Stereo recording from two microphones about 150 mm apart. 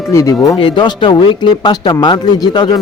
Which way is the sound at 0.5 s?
35° left (ahead or behind).